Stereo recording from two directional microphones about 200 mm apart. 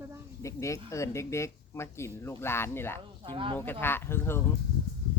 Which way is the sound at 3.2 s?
25° right (ahead or behind).